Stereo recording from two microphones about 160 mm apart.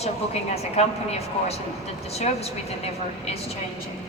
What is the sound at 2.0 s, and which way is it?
A woman's voice, 40° left (ahead or behind).